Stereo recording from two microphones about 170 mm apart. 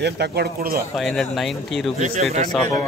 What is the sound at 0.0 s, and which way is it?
Speech, 70° right (ahead or behind).